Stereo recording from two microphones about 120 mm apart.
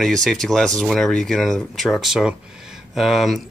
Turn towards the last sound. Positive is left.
turn(degrees=0)  # may be behind; listen again after turning